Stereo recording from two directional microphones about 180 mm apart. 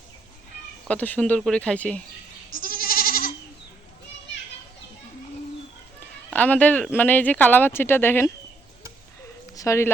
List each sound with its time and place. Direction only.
0.9 s speech: 10° left (ahead or behind)
2.5 s goat: 55° left (ahead or behind)
6.3 s speech: 10° left (ahead or behind)
9.6 s speech: 15° left (ahead or behind)